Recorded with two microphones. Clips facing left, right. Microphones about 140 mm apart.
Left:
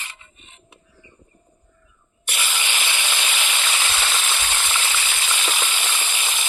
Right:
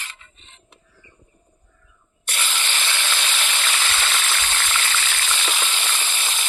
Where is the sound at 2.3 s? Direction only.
10° left (ahead or behind).